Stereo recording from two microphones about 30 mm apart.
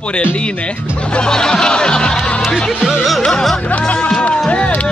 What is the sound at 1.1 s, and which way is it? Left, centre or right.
Speech, left.